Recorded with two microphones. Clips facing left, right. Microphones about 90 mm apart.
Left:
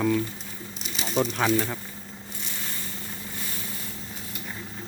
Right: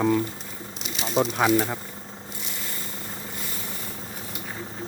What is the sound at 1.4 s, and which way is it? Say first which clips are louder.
Speech: right 3 dB; 15° right (ahead or behind).